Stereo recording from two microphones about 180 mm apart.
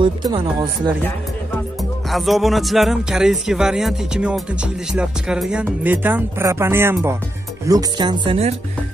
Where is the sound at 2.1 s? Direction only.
Centre (ahead or behind).